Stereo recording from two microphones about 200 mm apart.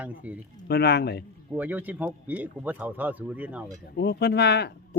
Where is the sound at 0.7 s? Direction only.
55° left (ahead or behind).